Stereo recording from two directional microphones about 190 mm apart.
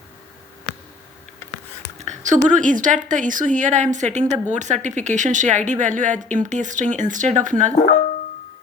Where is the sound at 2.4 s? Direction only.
45° right (ahead or behind).